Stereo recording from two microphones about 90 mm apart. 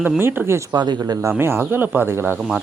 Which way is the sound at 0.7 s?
50° right (ahead or behind).